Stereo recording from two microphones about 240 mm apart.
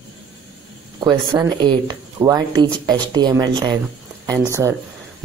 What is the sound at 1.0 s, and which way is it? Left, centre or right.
Speech, centre.